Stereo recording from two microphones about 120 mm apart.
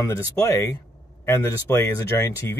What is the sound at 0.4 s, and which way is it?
Speech, 25° left (ahead or behind).